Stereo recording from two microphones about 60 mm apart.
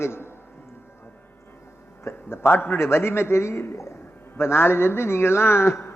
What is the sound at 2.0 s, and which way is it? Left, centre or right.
A man's voice, left.